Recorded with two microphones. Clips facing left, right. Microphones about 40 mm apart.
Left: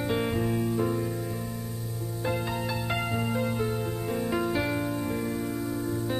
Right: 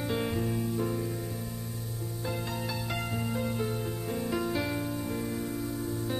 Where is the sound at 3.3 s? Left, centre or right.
Centre.